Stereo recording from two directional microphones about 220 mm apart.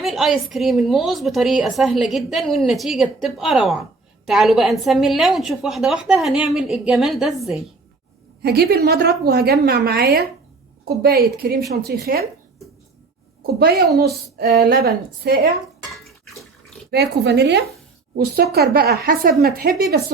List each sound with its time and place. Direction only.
0.0 s a woman's voice: centre (ahead or behind)
8.4 s a woman's voice: 45° right (ahead or behind)
13.4 s a woman's voice: 45° right (ahead or behind)
16.9 s a woman's voice: 50° right (ahead or behind)